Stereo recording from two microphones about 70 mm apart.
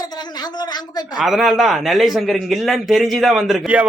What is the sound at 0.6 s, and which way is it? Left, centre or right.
Speech, left.